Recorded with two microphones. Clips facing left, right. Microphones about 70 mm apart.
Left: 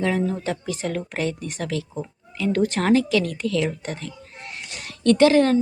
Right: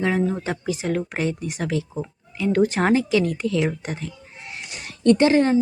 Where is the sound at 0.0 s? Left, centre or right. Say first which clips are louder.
Right 1 dB; centre.